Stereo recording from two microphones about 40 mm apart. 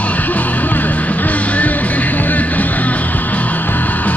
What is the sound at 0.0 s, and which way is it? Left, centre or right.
Music, left.